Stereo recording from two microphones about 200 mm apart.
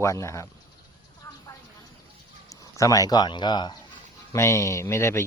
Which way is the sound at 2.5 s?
15° left (ahead or behind).